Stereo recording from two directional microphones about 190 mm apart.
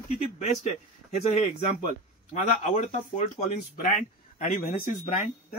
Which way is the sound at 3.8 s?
40° left (ahead or behind).